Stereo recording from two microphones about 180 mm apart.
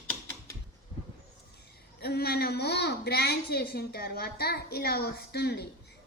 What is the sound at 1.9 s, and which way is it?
A woman's voice, 60° left (ahead or behind).